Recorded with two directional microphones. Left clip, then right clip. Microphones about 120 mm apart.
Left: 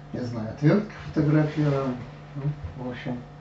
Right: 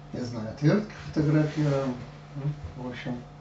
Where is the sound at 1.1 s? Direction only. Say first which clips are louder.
Left 2 dB; 35° right (ahead or behind).